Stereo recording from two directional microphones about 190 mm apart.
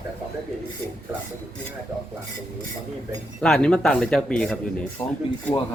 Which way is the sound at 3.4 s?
5° left (ahead or behind).